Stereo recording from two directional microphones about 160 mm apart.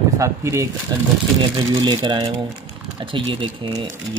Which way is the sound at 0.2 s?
20° right (ahead or behind).